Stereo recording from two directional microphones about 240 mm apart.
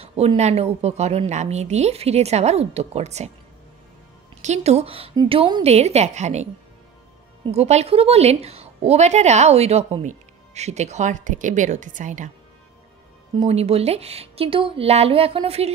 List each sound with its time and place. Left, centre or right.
0.0 s a woman's voice: right
4.4 s a woman's voice: right
13.4 s a woman's voice: right